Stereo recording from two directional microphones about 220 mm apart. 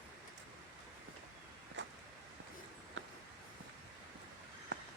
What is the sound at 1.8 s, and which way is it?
Vehicle, 55° right (ahead or behind).